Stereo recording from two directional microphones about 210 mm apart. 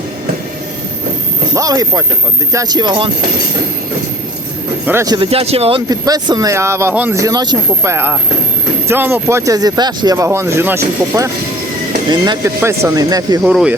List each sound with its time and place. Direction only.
1.5 s speech: 15° right (ahead or behind)
4.9 s speech: 15° right (ahead or behind)
5.9 s speech: 20° right (ahead or behind)
13.5 s speech: 5° right (ahead or behind)